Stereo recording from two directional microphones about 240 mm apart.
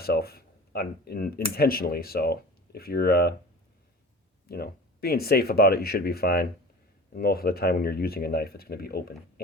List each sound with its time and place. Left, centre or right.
0.0 s speech: left
4.4 s speech: left